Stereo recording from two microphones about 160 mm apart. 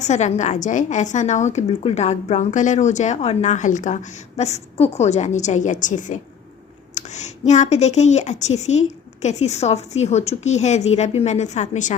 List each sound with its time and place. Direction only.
0.0 s a woman's voice: 45° left (ahead or behind)